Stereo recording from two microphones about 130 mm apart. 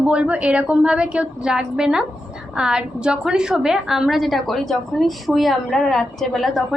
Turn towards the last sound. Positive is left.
turn(degrees=0)  # may be behind; listen again after turning